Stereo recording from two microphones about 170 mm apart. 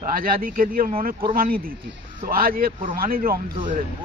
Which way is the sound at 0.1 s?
55° right (ahead or behind).